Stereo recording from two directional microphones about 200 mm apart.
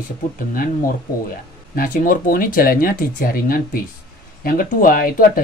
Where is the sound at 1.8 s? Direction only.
45° left (ahead or behind).